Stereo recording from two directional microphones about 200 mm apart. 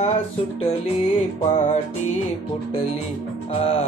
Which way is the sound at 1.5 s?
35° left (ahead or behind).